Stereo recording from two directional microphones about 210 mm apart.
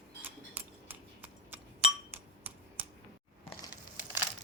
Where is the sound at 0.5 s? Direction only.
10° right (ahead or behind).